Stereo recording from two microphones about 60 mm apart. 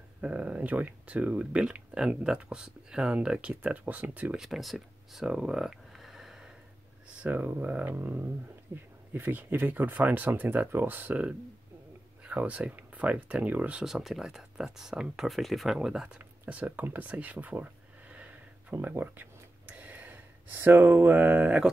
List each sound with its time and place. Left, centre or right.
0.2 s speech: right
4.4 s speech: centre
7.2 s speech: right
8.7 s speech: right
9.1 s speech: right
13.8 s speech: centre
16.2 s speech: right
18.7 s gasp: right